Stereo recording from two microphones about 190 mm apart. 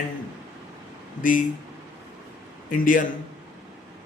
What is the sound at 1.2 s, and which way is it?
Speech, 45° left (ahead or behind).